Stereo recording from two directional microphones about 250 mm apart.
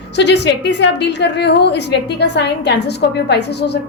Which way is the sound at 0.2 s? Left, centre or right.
Left.